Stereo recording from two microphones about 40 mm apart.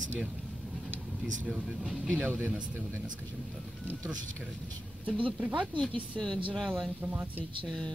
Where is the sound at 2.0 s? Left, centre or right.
Right.